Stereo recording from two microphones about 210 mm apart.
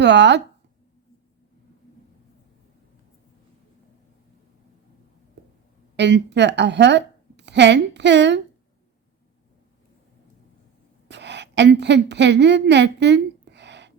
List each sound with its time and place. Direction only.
0.0 s speech: 55° right (ahead or behind)
6.0 s a woman's voice: 55° right (ahead or behind)
11.1 s a woman's voice: 55° right (ahead or behind)